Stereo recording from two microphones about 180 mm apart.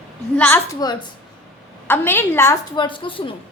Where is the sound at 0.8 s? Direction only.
20° left (ahead or behind).